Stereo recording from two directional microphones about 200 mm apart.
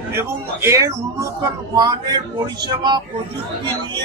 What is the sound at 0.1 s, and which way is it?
Speech, 15° right (ahead or behind).